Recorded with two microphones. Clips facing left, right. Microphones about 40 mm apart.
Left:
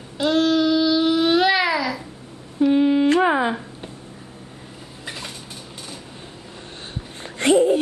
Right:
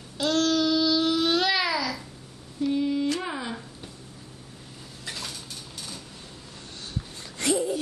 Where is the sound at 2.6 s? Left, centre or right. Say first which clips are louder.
Left 9 dB; left.